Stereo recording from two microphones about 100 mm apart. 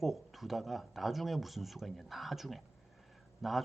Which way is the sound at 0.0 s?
Centre (ahead or behind).